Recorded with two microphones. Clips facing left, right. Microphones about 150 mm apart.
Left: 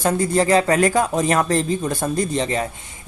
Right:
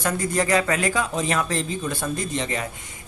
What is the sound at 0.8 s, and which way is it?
Speech, 45° left (ahead or behind).